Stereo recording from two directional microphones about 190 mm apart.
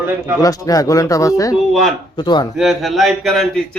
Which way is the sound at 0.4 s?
20° left (ahead or behind).